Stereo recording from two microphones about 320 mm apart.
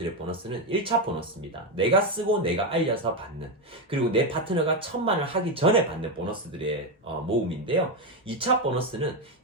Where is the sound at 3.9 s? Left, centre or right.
Centre.